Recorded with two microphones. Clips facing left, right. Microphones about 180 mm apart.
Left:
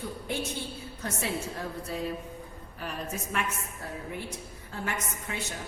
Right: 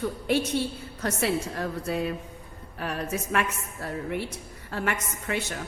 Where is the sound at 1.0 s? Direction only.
70° right (ahead or behind).